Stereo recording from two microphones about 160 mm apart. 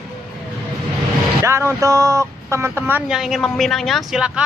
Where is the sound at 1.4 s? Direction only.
15° right (ahead or behind).